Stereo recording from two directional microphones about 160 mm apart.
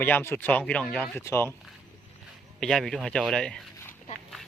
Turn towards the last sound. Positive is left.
turn(degrees=5)  # may be behind; listen again after turning